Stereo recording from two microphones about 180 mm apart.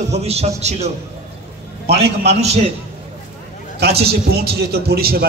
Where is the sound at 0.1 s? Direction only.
35° right (ahead or behind).